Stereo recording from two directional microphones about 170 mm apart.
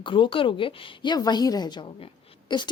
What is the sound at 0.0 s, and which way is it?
A woman's voice, 30° left (ahead or behind).